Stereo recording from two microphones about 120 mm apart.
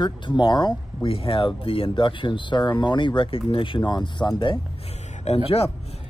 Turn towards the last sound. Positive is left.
turn(degrees=55)  # may be behind; listen again after turning